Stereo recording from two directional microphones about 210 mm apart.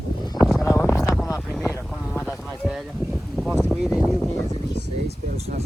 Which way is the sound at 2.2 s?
10° left (ahead or behind).